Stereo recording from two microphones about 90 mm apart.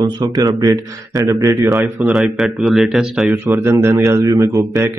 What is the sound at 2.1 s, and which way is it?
Speech, centre (ahead or behind).